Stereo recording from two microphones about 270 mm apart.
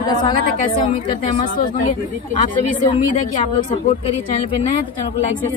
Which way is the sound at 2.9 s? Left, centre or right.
Centre.